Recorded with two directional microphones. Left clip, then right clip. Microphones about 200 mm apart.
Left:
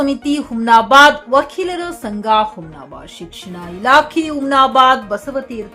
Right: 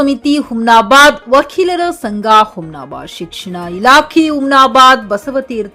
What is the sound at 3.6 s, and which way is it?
Speech, 30° right (ahead or behind).